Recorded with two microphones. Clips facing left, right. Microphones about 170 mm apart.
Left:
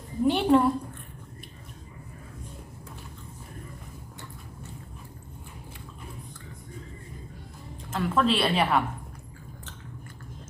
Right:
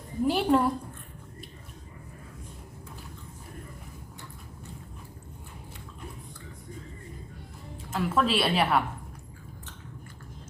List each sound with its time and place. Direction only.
0.3 s a woman's voice: centre (ahead or behind)
7.9 s a woman's voice: 5° right (ahead or behind)